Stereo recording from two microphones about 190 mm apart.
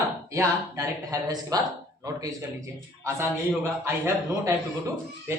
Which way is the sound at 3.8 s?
15° right (ahead or behind).